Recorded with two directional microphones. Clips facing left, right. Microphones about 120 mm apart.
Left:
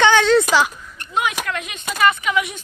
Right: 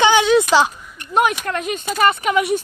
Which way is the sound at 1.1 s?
45° right (ahead or behind).